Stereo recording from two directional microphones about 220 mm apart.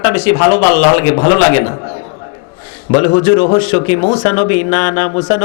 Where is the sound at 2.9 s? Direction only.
25° left (ahead or behind).